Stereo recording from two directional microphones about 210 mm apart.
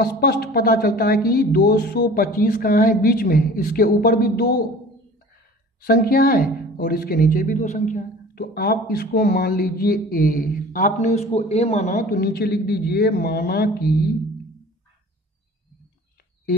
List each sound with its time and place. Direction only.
0.0 s speech: 45° left (ahead or behind)
5.8 s speech: 45° left (ahead or behind)